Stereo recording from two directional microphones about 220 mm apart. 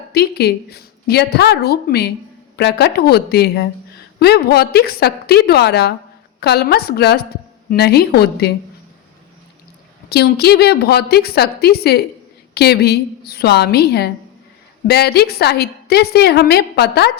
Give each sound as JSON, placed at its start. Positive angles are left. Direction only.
{"t": 0.1, "sound": "a woman's voice", "side_deg": 45}
{"t": 10.1, "sound": "a woman's voice", "side_deg": 45}